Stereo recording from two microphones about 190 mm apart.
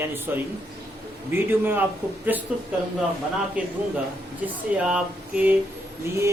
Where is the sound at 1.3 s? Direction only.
10° right (ahead or behind).